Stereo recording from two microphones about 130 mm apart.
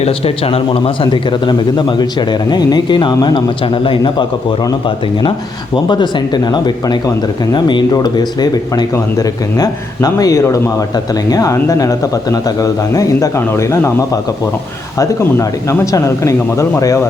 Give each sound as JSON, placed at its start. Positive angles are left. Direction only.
{"t": 0.0, "sound": "a man's voice", "side_deg": 50}
{"t": 5.7, "sound": "a man's voice", "side_deg": 35}